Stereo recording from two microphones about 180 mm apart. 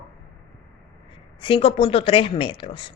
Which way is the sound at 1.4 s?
30° left (ahead or behind).